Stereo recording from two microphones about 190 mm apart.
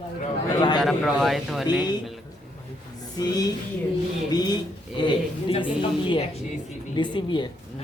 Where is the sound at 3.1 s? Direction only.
20° left (ahead or behind).